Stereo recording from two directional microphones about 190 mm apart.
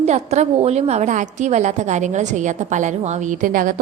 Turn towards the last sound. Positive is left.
turn(degrees=-45)  # may be behind; listen again after turning